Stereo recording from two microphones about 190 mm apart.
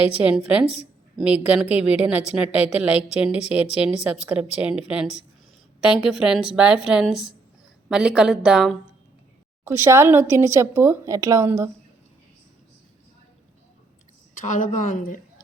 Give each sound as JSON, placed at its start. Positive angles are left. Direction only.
{"t": 0.2, "sound": "a woman's voice", "side_deg": -5}
{"t": 9.6, "sound": "a woman's voice", "side_deg": -15}
{"t": 14.4, "sound": "speech", "side_deg": 40}